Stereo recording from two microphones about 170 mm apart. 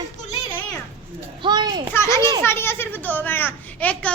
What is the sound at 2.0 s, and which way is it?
A child's voice, 15° left (ahead or behind).